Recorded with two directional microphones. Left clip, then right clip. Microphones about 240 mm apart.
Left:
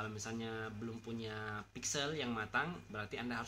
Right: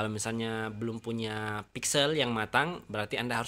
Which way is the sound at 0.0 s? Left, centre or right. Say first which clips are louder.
Right 10 dB; right.